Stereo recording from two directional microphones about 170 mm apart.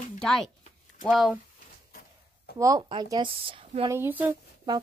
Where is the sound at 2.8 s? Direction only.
30° right (ahead or behind).